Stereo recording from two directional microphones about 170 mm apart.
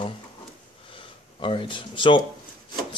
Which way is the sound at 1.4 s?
30° left (ahead or behind).